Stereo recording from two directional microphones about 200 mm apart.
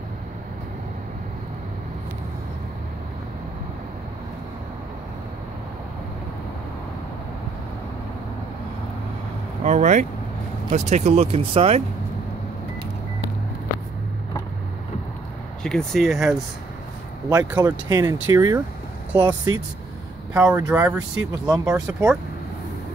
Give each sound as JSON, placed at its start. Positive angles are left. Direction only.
{"t": 9.7, "sound": "speech", "side_deg": -40}
{"t": 15.6, "sound": "speech", "side_deg": 0}
{"t": 17.3, "sound": "speech", "side_deg": -15}